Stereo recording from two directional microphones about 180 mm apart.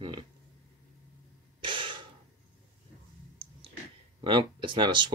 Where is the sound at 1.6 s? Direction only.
25° right (ahead or behind).